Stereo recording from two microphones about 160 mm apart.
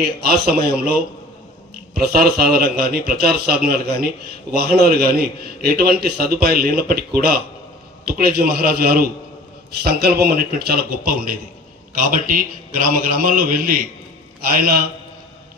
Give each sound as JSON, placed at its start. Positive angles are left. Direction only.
{"t": 0.2, "sound": "a man's voice", "side_deg": -75}